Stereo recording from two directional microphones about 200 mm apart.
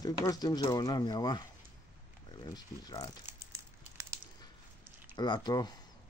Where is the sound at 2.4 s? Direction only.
20° left (ahead or behind).